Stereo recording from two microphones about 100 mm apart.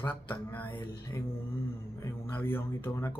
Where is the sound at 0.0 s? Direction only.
20° left (ahead or behind).